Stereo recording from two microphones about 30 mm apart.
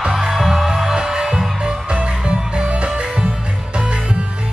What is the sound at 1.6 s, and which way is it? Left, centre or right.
Music, right.